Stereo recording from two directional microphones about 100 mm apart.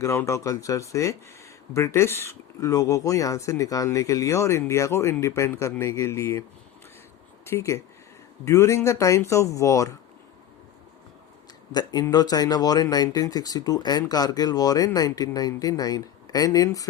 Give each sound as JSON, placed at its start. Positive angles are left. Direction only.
{"t": 0.0, "sound": "speech", "side_deg": 30}
{"t": 7.4, "sound": "speech", "side_deg": 30}
{"t": 11.7, "sound": "speech", "side_deg": 45}